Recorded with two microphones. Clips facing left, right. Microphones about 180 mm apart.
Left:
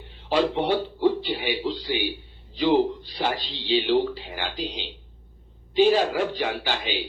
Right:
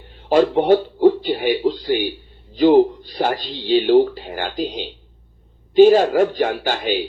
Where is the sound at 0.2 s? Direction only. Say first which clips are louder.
Right 7 dB; 45° right (ahead or behind).